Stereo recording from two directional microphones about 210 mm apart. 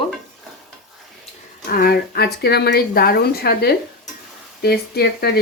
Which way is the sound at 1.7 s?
45° left (ahead or behind).